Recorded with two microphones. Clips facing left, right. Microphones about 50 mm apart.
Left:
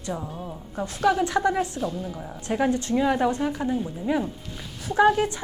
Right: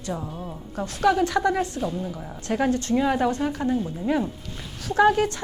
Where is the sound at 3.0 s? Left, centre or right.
Centre.